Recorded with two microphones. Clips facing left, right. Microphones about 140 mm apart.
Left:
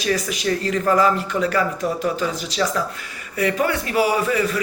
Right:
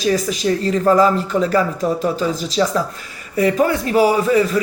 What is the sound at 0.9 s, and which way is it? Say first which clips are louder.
Speech: right 4 dB; 35° right (ahead or behind).